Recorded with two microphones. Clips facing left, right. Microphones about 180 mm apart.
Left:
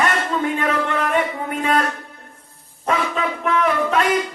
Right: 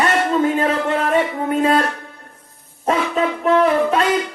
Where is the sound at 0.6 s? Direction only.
30° right (ahead or behind).